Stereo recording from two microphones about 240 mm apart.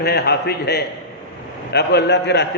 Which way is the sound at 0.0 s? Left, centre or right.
Left.